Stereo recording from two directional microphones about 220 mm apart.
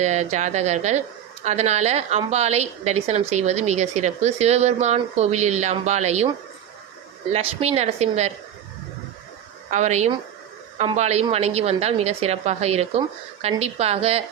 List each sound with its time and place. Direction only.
0.0 s a woman's voice: 30° right (ahead or behind)
7.3 s a woman's voice: 30° right (ahead or behind)
9.6 s a woman's voice: 30° right (ahead or behind)